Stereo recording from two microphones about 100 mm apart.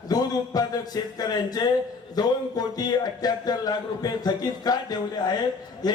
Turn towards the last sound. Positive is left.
turn(degrees=40)  # may be behind; listen again after turning